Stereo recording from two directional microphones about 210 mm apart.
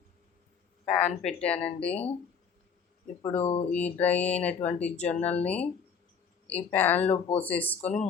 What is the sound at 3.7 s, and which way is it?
Speech, 5° left (ahead or behind).